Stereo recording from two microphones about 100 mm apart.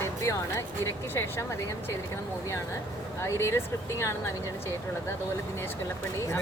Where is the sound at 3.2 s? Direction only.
30° left (ahead or behind).